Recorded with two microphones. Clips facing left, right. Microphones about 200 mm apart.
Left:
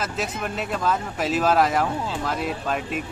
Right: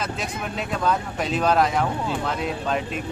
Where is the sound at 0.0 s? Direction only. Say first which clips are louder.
Left 1 dB; 5° left (ahead or behind).